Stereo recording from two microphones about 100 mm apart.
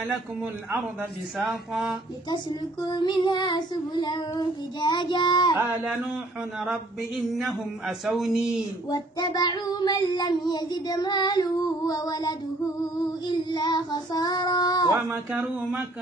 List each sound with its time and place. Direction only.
1.4 s a sound: 5° right (ahead or behind)
2.2 s child singing: 45° left (ahead or behind)
6.6 s mantra: 5° right (ahead or behind)
8.9 s child singing: 45° left (ahead or behind)
14.9 s speech: 30° right (ahead or behind)
15.4 s a sound: 10° right (ahead or behind)